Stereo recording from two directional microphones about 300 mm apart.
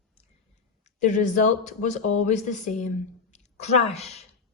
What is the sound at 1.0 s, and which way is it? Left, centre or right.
Speech, left.